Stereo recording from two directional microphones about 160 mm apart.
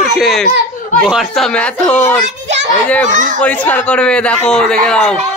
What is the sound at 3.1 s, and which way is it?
Speech, 50° right (ahead or behind).